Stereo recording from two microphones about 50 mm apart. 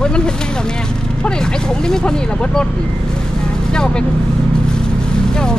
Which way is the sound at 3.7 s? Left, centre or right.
Centre.